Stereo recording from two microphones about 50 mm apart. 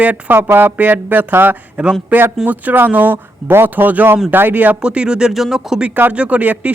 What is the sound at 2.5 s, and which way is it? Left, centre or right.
Speech, right.